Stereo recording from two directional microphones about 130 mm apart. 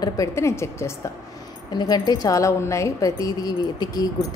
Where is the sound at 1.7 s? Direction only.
30° left (ahead or behind).